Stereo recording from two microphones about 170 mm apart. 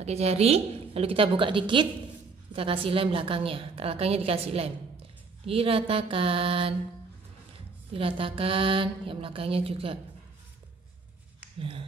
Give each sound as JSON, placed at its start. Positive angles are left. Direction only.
{"t": 0.0, "sound": "a woman's voice", "side_deg": -40}
{"t": 7.9, "sound": "a woman's voice", "side_deg": -35}